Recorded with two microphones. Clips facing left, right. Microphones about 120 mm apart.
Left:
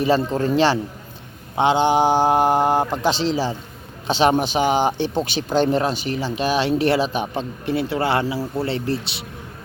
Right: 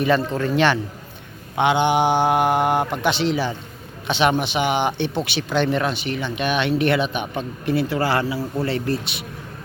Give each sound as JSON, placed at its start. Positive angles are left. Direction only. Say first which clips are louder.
{"t": 0.3, "sound": "speech", "louder": "left 1 dB", "side_deg": 30}